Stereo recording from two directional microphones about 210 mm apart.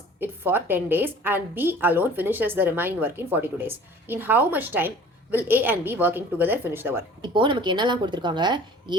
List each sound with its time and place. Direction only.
0.2 s a woman's voice: 10° right (ahead or behind)
7.2 s a woman's voice: 25° right (ahead or behind)